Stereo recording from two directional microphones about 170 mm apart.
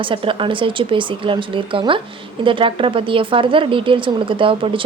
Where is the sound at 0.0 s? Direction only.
30° right (ahead or behind).